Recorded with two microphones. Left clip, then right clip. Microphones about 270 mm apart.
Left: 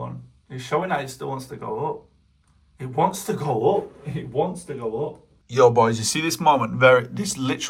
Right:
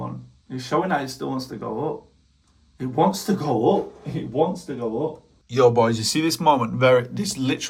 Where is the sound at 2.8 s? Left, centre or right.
Left.